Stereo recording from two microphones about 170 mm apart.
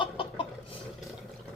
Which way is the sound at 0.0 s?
30° left (ahead or behind).